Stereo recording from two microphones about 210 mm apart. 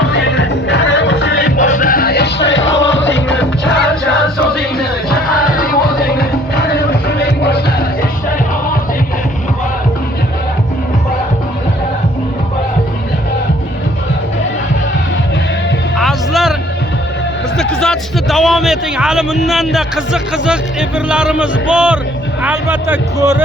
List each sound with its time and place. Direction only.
0.1 s music: 55° left (ahead or behind)
16.0 s music: centre (ahead or behind)
17.6 s a man's voice: 5° left (ahead or behind); by 23.4 s 15° right (ahead or behind)